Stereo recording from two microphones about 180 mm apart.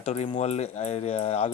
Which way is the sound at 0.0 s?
35° left (ahead or behind).